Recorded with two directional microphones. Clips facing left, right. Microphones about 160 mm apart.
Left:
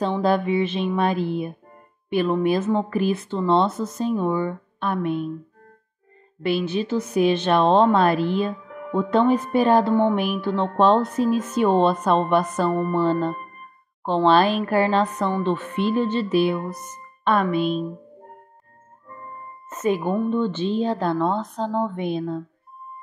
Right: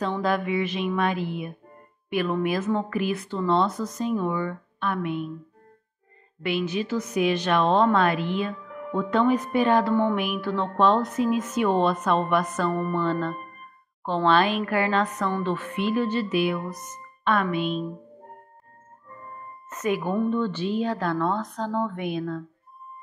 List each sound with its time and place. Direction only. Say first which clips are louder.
0.0 s a woman's voice: left 4 dB; 30° left (ahead or behind)
6.4 s a woman's voice: left 3 dB; 30° left (ahead or behind)
19.7 s speech: left 3 dB; 25° left (ahead or behind)